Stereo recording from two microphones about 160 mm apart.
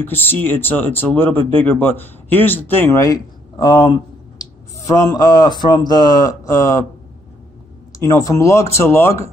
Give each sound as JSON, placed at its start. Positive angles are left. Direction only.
{"t": 0.0, "sound": "speech", "side_deg": 10}
{"t": 8.0, "sound": "speech", "side_deg": 20}